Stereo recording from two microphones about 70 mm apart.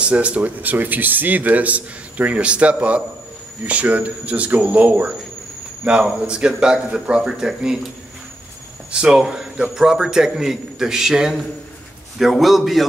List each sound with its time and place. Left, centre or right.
0.0 s a man's voice: centre
8.9 s a man's voice: centre